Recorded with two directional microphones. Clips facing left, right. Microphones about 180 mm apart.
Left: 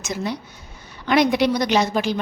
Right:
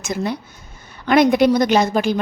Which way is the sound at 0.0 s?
55° right (ahead or behind).